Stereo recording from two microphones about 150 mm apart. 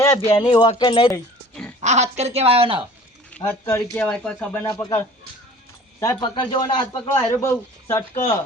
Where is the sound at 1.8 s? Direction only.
50° right (ahead or behind).